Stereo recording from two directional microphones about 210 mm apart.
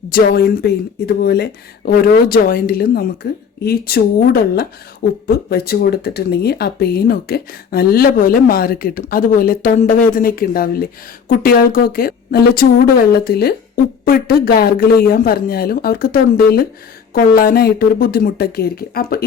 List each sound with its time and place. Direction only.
0.1 s speech: 45° left (ahead or behind)